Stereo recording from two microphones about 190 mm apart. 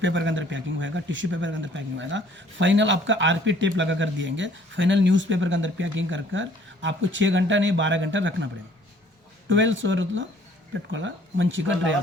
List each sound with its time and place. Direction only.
0.0 s speech: 75° right (ahead or behind)
9.5 s speech: 80° right